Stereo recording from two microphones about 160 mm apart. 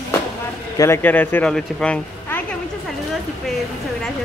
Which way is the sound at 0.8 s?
15° left (ahead or behind).